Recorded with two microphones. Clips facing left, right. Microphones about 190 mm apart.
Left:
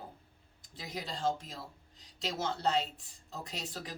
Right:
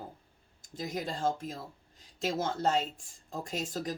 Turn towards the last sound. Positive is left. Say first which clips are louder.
# right 8 dB
turn(degrees=-45)  # may be behind; listen again after turning